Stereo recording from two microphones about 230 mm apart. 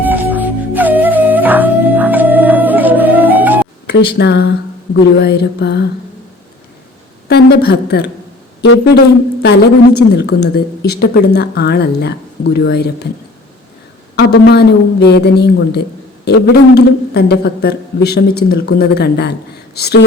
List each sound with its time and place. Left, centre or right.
0.0 s music: centre
3.8 s a woman's voice: left
7.3 s a woman's voice: left
9.4 s a woman's voice: left
14.2 s a woman's voice: left